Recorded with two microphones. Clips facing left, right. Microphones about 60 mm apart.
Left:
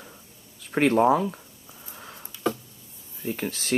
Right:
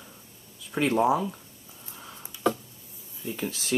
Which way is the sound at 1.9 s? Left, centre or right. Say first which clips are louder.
Left 1 dB; left.